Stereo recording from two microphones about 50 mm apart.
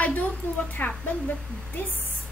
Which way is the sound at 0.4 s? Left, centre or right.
Left.